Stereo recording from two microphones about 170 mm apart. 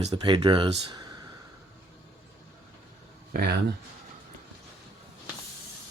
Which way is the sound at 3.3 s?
65° right (ahead or behind).